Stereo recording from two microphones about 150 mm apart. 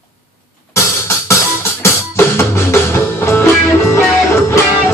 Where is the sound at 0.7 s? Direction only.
20° left (ahead or behind).